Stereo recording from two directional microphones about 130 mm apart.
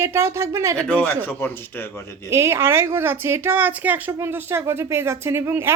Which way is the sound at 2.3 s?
20° right (ahead or behind).